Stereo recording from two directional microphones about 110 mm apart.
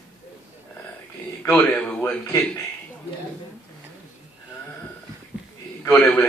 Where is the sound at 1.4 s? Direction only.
15° left (ahead or behind).